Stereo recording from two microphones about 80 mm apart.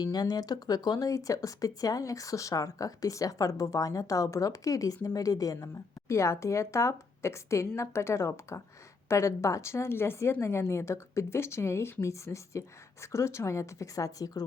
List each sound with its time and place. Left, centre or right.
0.0 s a woman's voice: left